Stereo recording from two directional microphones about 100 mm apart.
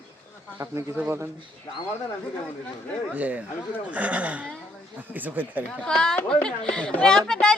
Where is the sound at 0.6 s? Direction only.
30° right (ahead or behind).